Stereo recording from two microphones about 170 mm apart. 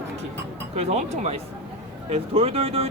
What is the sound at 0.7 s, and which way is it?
Speech, 40° right (ahead or behind).